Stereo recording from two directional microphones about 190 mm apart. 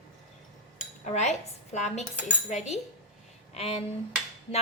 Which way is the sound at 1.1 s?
35° left (ahead or behind).